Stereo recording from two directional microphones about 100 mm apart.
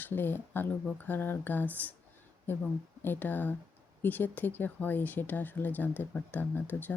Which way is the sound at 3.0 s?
20° left (ahead or behind).